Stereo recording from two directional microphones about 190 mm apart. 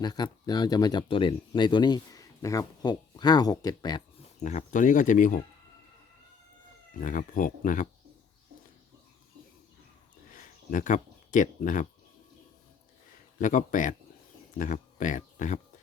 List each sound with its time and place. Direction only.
0.0 s speech: 20° left (ahead or behind)
4.4 s speech: 40° left (ahead or behind)
7.0 s speech: 45° left (ahead or behind)
10.3 s speech: 45° left (ahead or behind)
13.4 s speech: 40° left (ahead or behind)